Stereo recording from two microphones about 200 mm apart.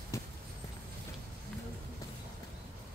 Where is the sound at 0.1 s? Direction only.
15° left (ahead or behind).